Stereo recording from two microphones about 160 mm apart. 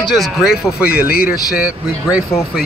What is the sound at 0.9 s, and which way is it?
Speech, 70° left (ahead or behind).